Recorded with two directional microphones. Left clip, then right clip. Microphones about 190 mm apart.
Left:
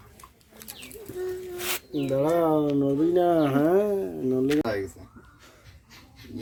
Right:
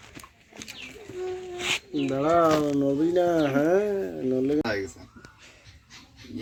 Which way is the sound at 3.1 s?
20° left (ahead or behind).